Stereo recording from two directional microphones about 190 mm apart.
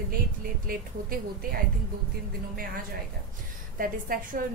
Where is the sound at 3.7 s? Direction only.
50° right (ahead or behind).